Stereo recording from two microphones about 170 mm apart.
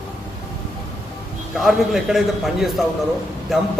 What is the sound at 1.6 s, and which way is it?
A man's voice, centre (ahead or behind).